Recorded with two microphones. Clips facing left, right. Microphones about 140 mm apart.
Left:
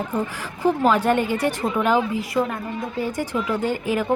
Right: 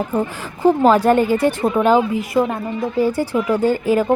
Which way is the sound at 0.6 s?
30° right (ahead or behind).